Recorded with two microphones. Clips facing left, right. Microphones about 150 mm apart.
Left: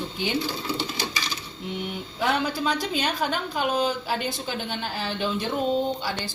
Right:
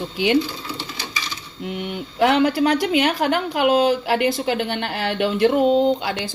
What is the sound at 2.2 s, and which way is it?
A woman's voice, 75° right (ahead or behind).